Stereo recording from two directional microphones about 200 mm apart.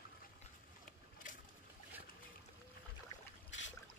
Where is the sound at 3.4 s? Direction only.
70° left (ahead or behind).